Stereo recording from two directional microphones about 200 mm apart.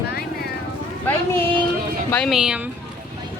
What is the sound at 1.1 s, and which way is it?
Speech, 10° left (ahead or behind).